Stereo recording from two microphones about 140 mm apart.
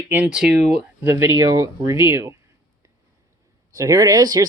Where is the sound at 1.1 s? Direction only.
20° right (ahead or behind).